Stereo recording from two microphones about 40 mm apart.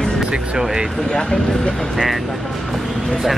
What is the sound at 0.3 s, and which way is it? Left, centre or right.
Speech, centre.